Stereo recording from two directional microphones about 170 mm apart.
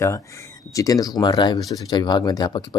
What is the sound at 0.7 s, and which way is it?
Speech, 20° left (ahead or behind).